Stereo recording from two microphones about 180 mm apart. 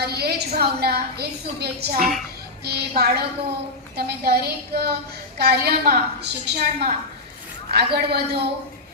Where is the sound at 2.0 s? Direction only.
Centre (ahead or behind).